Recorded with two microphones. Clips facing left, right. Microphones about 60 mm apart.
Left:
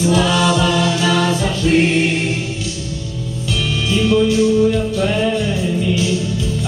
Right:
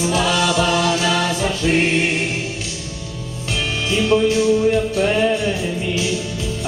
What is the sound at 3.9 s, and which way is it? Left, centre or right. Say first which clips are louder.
Music: left 1 dB; right.